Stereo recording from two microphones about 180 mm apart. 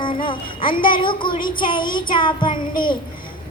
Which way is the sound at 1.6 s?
25° left (ahead or behind).